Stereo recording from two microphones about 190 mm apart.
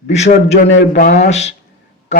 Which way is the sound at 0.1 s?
35° left (ahead or behind).